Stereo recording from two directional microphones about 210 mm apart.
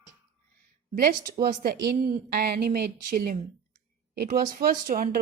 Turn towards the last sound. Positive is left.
turn(degrees=-45)  # may be behind; listen again after turning